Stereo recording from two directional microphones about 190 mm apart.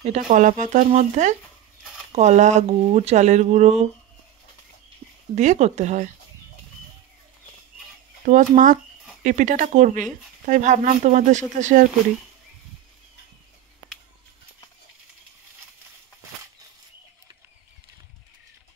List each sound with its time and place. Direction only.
0.0 s speech: 40° right (ahead or behind)
5.3 s speech: 40° right (ahead or behind)
8.3 s speech: 40° right (ahead or behind)